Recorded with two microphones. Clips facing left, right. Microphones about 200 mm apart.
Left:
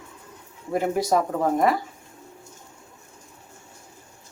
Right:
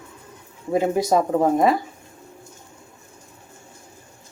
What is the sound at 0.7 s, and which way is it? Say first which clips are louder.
Speech: right 3 dB; 20° right (ahead or behind).